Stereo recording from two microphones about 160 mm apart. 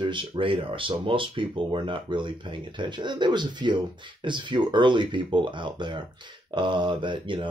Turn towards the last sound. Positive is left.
turn(degrees=-30)  # may be behind; listen again after turning